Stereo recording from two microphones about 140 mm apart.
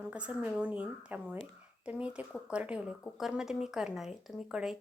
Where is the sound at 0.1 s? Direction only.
10° right (ahead or behind).